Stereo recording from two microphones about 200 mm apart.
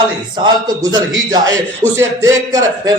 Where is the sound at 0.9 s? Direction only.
20° right (ahead or behind).